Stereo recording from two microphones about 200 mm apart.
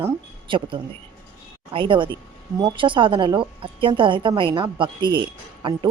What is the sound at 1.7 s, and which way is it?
A woman's voice, 25° right (ahead or behind).